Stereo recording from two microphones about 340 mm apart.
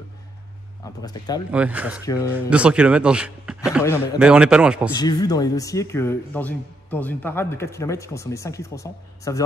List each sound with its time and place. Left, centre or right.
1.0 s speech: centre
1.5 s speech: centre
2.0 s speech: centre
2.5 s speech: centre
3.8 s speech: centre
4.2 s speech: centre
4.9 s speech: centre